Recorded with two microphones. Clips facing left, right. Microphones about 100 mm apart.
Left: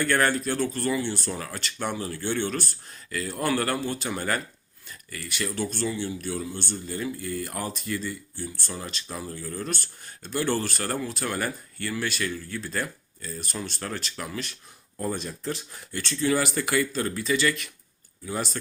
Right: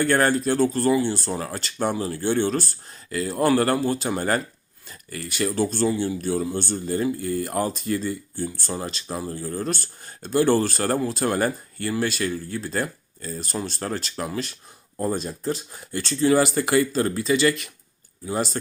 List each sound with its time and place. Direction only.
0.0 s speech: 30° right (ahead or behind)